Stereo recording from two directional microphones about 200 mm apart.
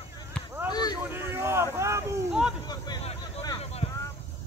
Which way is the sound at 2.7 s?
25° left (ahead or behind).